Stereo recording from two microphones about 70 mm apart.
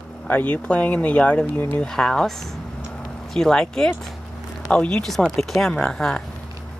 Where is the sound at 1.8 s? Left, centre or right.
Centre.